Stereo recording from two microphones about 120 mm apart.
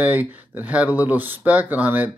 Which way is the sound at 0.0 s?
15° right (ahead or behind).